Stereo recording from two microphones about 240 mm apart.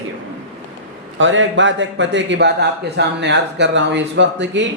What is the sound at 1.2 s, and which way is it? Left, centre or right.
A man's voice, right.